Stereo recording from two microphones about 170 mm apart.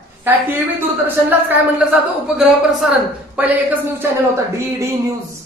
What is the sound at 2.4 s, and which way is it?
A woman's voice, 5° right (ahead or behind).